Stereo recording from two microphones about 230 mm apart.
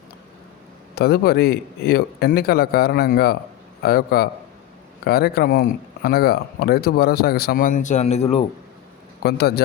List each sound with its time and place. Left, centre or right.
0.9 s a man's voice: left
9.2 s a man's voice: left